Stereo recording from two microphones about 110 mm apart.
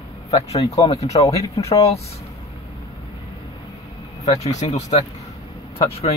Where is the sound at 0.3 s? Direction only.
70° left (ahead or behind).